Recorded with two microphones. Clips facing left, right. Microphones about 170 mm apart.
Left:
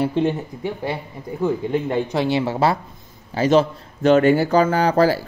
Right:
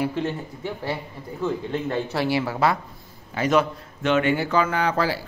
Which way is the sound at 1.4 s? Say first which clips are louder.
Left 5 dB; 15° left (ahead or behind).